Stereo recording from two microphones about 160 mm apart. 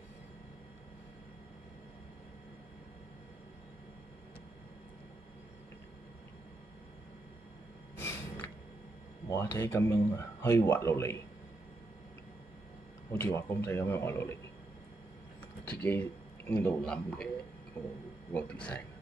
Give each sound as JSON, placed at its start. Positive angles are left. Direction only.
{"t": 8.0, "sound": "snort", "side_deg": 15}
{"t": 9.3, "sound": "speech", "side_deg": 15}
{"t": 13.1, "sound": "speech", "side_deg": 15}
{"t": 15.7, "sound": "speech", "side_deg": 10}
{"t": 18.3, "sound": "speech", "side_deg": 5}